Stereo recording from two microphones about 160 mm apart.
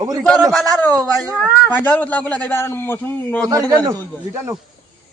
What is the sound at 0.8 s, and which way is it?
A man's voice, 10° left (ahead or behind).